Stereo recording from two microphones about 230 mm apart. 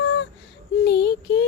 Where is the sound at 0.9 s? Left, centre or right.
Left.